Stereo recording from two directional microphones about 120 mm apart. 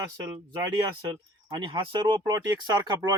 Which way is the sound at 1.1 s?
40° right (ahead or behind).